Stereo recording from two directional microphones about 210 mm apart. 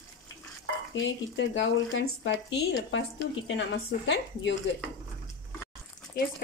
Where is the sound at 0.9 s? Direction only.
60° left (ahead or behind).